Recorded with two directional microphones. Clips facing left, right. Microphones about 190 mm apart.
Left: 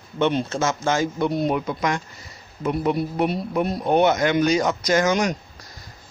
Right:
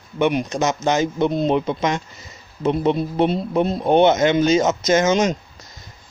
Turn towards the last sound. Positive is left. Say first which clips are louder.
# right 3 dB
turn(degrees=-20)  # may be behind; listen again after turning